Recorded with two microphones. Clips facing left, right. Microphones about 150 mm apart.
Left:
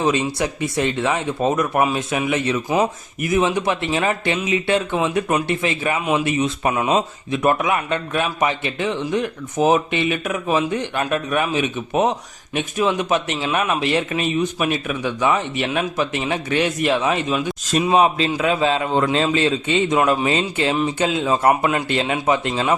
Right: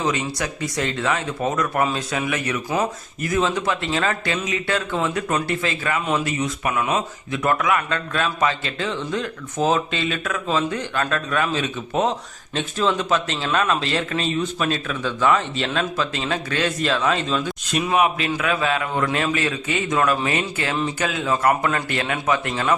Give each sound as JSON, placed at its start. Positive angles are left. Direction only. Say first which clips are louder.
{"t": 0.0, "sound": "speech", "louder": "left 4 dB", "side_deg": 25}
{"t": 17.8, "sound": "speech", "louder": "left 3 dB", "side_deg": 30}